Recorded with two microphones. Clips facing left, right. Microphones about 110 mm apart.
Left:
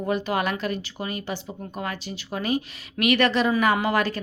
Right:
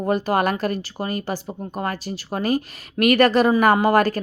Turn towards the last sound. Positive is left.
turn(degrees=-45)  # may be behind; listen again after turning